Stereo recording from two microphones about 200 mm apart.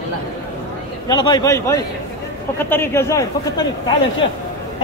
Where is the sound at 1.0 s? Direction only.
20° left (ahead or behind).